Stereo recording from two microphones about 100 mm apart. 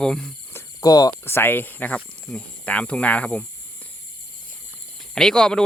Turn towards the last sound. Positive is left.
turn(degrees=5)  # may be behind; listen again after turning